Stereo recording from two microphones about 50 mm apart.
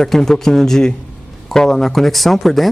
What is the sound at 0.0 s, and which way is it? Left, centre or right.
A man's voice, centre.